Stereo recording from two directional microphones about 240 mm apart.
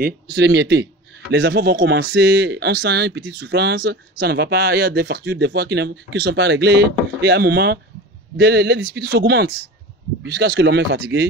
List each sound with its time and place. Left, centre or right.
0.0 s speech: right